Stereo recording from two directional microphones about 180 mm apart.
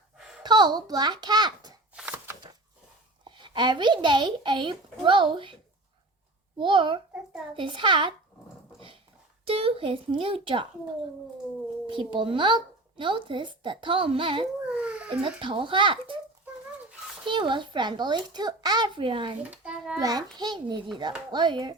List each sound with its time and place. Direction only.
0.4 s a child's voice: 25° right (ahead or behind)
2.0 s a sound: 10° right (ahead or behind)
3.2 s speech: 25° right (ahead or behind)
6.6 s speech: 30° right (ahead or behind)
9.4 s speech: 30° right (ahead or behind)
11.9 s speech: 30° right (ahead or behind)
14.7 s a sound: 5° right (ahead or behind)
15.1 s speech: 30° right (ahead or behind)
17.2 s speech: 25° right (ahead or behind)
19.4 s a child's voice: 5° right (ahead or behind)
20.0 s speech: 20° right (ahead or behind)